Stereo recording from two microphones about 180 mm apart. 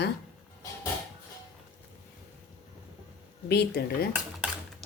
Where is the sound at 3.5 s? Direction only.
65° left (ahead or behind).